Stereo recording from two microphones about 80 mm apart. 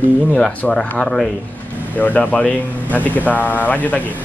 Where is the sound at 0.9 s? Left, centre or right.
Centre.